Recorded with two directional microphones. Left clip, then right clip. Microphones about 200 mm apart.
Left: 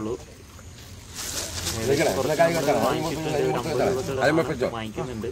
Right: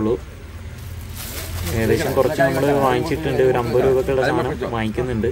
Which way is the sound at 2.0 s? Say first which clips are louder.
Right 2 dB; 10° left (ahead or behind).